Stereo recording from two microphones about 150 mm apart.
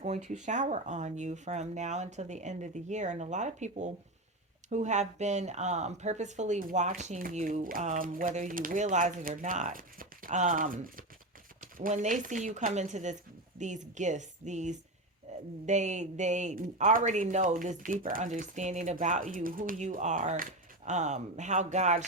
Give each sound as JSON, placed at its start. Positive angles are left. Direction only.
{"t": 0.0, "sound": "speech", "side_deg": -50}
{"t": 11.6, "sound": "speech", "side_deg": -55}
{"t": 15.3, "sound": "a sound", "side_deg": -50}
{"t": 15.6, "sound": "speech", "side_deg": -50}